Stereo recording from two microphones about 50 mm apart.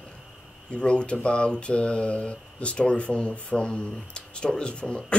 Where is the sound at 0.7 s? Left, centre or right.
Left.